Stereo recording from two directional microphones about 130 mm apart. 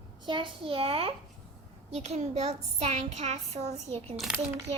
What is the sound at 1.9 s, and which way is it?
Speech, 60° right (ahead or behind).